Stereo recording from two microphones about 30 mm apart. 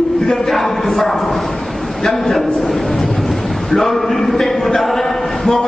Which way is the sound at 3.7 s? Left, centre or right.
Centre.